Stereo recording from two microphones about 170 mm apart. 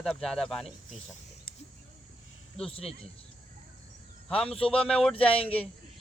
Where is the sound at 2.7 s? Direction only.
35° left (ahead or behind).